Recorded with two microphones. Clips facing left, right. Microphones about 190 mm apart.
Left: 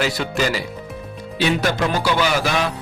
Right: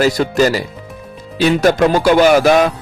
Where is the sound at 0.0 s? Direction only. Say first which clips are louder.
Right 8 dB; 40° right (ahead or behind).